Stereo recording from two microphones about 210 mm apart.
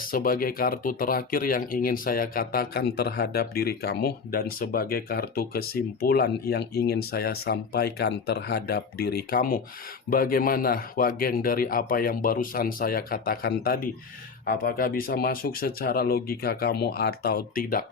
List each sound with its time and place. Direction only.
0.0 s speech: 40° left (ahead or behind)